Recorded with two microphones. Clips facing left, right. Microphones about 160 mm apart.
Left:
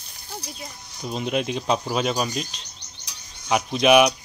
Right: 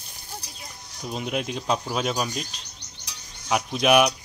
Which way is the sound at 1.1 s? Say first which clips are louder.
Left 4 dB; 5° right (ahead or behind).